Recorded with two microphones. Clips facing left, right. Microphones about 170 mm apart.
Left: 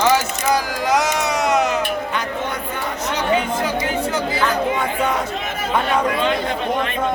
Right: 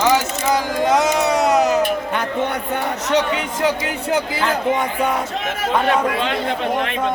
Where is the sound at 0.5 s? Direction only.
25° right (ahead or behind).